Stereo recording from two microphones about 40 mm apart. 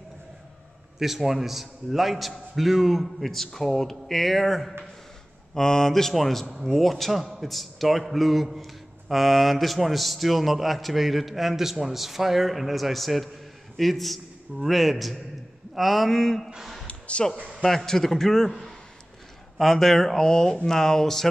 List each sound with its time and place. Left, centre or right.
0.9 s a man's voice: centre
5.5 s a man's voice: centre
16.8 s a sound: left
17.6 s a man's voice: centre